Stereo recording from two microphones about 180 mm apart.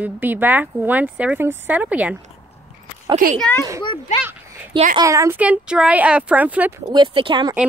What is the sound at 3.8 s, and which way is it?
Speech, 25° left (ahead or behind).